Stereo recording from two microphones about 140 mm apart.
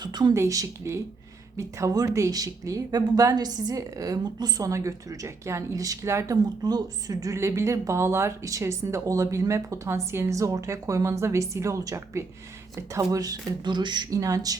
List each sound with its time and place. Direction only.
0.0 s a woman's voice: 30° right (ahead or behind)